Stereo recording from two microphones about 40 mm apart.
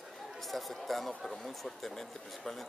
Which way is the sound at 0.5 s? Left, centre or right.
Centre.